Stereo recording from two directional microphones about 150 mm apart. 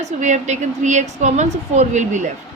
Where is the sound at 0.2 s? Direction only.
50° right (ahead or behind).